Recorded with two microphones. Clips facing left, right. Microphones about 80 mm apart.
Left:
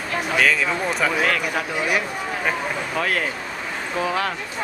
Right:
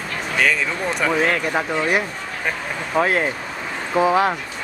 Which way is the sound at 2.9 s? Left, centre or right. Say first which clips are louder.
Right 7 dB; right.